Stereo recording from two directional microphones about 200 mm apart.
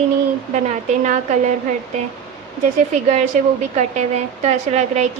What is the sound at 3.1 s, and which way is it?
A woman's voice, 35° right (ahead or behind).